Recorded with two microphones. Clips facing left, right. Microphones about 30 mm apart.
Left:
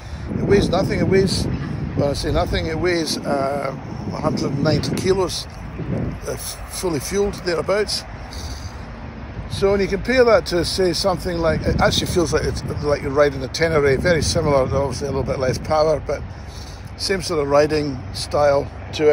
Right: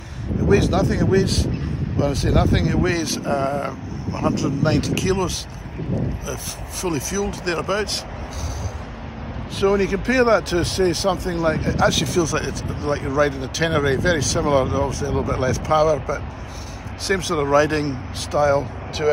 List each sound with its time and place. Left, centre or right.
0.5 s speech: left
6.3 s speech: left
9.6 s speech: left
17.1 s speech: centre
17.5 s speech: left